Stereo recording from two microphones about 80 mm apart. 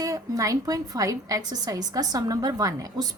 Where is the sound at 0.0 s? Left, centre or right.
Right.